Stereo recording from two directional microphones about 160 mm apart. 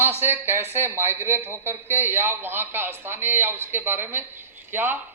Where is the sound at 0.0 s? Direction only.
15° right (ahead or behind).